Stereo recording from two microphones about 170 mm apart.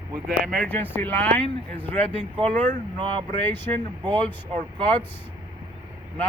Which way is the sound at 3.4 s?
10° left (ahead or behind).